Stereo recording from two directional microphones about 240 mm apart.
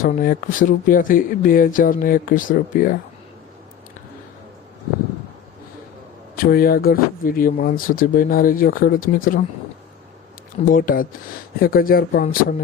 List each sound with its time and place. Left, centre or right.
0.0 s speech: left
6.3 s speech: left
10.7 s speech: left